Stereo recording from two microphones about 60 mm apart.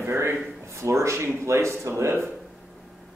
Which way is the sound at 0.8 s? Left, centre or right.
Right.